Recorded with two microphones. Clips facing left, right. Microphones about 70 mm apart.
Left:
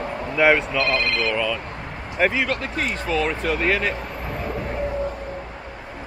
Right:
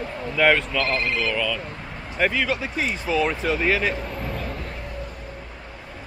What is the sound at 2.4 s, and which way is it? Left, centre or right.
A man's voice, centre.